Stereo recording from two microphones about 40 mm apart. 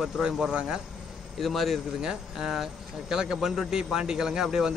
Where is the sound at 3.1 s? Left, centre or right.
Centre.